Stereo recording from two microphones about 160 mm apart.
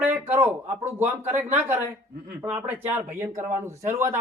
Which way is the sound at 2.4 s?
10° right (ahead or behind).